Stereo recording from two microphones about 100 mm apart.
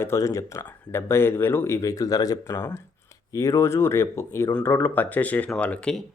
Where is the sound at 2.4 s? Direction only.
25° left (ahead or behind).